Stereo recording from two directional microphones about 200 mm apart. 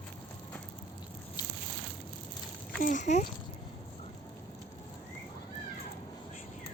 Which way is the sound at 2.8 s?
40° left (ahead or behind).